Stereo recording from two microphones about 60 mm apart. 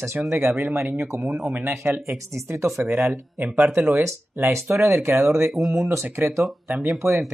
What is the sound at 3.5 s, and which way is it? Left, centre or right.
Speech, right.